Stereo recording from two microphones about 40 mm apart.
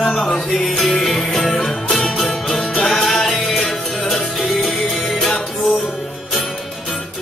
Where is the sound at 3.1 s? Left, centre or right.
Centre.